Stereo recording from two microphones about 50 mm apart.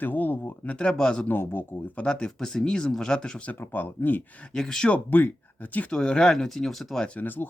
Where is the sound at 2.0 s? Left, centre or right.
Centre.